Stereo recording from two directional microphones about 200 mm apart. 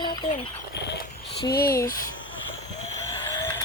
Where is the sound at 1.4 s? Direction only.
50° left (ahead or behind).